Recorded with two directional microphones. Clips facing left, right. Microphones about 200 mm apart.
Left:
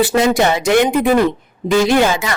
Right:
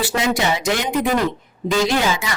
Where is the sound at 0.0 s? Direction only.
55° left (ahead or behind).